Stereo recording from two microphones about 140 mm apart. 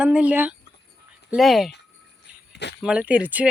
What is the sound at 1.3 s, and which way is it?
Speech, centre (ahead or behind).